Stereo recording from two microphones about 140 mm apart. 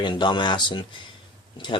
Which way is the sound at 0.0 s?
35° left (ahead or behind).